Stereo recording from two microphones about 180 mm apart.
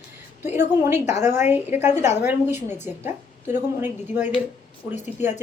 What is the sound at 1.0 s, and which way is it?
Speech, 40° left (ahead or behind).